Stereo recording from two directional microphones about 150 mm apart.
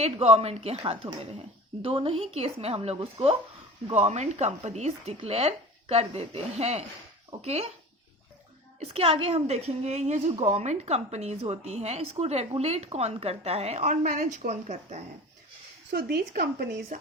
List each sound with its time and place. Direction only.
0.0 s a woman's voice: 45° right (ahead or behind)
8.8 s a woman's voice: 40° right (ahead or behind)
15.9 s speech: 90° right